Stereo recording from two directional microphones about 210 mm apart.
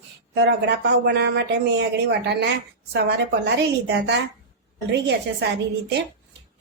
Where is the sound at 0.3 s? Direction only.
55° right (ahead or behind).